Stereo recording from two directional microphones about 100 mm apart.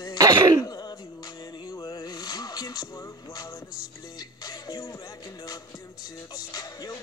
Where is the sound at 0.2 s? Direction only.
40° right (ahead or behind).